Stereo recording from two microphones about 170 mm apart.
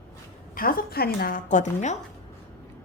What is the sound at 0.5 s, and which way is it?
A woman's voice, 60° left (ahead or behind).